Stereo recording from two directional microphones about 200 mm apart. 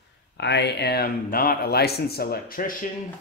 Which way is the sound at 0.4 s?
60° left (ahead or behind).